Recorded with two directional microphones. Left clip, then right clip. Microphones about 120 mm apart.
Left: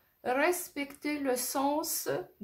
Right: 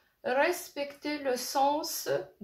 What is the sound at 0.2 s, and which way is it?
Speech, 45° left (ahead or behind).